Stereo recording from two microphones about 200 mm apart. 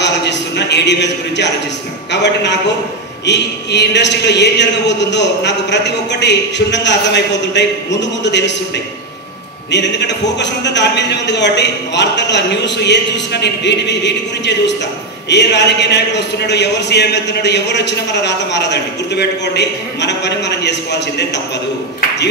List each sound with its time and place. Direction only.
0.0 s a man's voice: 60° left (ahead or behind)